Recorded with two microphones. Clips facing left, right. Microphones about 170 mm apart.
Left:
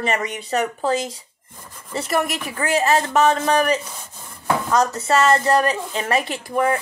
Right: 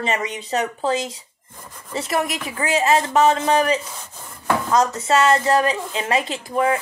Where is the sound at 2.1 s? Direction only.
60° left (ahead or behind).